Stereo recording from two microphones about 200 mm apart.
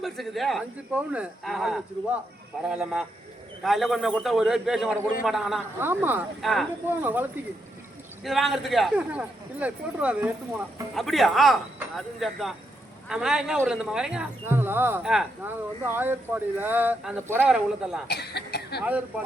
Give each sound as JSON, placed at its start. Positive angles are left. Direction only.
{"t": 0.0, "sound": "speech", "side_deg": 0}
{"t": 18.1, "sound": "speech", "side_deg": 55}
{"t": 18.8, "sound": "speech", "side_deg": -5}